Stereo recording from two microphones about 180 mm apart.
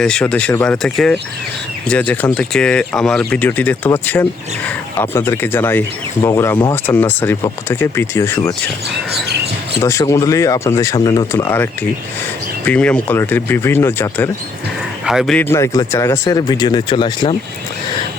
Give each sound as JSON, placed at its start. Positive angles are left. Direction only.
{"t": 0.0, "sound": "speech", "side_deg": 5}
{"t": 9.8, "sound": "speech", "side_deg": 15}
{"t": 15.0, "sound": "speech", "side_deg": 0}
{"t": 15.4, "sound": "speech", "side_deg": 15}